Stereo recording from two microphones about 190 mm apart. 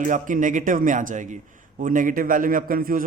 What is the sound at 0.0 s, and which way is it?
A man's voice, 40° right (ahead or behind).